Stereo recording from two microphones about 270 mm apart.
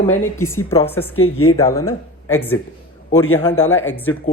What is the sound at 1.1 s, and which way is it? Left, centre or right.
Speech, left.